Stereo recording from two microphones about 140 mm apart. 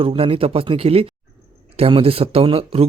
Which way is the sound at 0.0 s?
40° right (ahead or behind).